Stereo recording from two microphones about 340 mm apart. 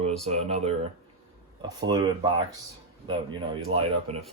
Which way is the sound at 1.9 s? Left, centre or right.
Centre.